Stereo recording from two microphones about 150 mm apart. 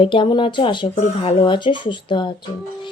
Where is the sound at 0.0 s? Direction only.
35° left (ahead or behind).